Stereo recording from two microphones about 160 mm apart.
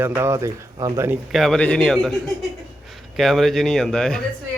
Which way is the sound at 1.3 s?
Centre (ahead or behind).